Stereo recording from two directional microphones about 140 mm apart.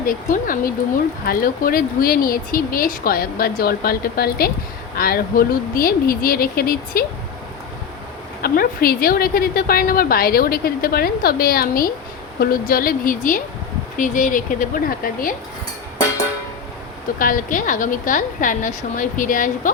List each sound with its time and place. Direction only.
0.0 s a woman's voice: 80° left
8.4 s a woman's voice: 90° left
17.2 s a woman's voice: 80° left